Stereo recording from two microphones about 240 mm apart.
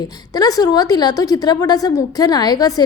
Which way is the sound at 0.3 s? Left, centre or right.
Centre.